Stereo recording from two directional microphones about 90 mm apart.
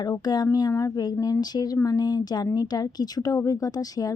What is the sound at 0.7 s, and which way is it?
Speech, 35° left (ahead or behind).